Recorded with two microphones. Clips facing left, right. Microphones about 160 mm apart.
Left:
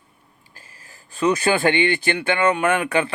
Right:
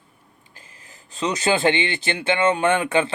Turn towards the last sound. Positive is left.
turn(degrees=-25)  # may be behind; listen again after turning